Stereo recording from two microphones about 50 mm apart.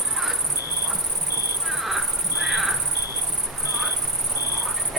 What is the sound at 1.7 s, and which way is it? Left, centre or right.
Cricket, centre.